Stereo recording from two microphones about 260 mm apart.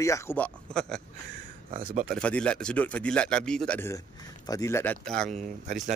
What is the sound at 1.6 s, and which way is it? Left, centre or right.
Speech, right.